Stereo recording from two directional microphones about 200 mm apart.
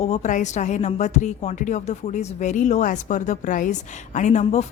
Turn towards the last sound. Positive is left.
turn(degrees=35)  # may be behind; listen again after turning